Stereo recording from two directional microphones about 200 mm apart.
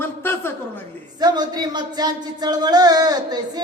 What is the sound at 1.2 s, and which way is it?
Music, 20° right (ahead or behind).